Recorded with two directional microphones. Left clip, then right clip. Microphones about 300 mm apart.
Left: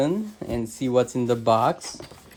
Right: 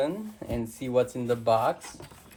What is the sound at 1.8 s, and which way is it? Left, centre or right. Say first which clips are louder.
Speech: left 7 dB; centre.